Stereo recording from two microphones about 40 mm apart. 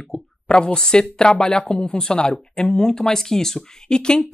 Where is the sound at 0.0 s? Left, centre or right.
Centre.